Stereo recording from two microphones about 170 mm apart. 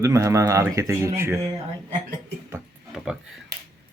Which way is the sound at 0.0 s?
20° right (ahead or behind).